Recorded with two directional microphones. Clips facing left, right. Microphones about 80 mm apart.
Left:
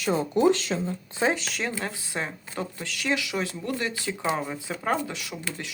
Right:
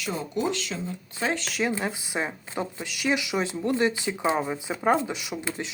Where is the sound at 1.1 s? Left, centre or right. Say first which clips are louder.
Left 3 dB; left.